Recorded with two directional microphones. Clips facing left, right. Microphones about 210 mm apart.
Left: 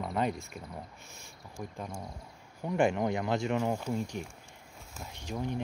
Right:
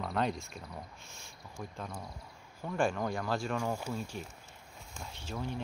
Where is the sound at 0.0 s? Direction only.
5° left (ahead or behind).